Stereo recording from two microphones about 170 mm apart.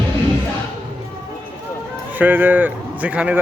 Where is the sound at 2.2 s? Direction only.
10° right (ahead or behind).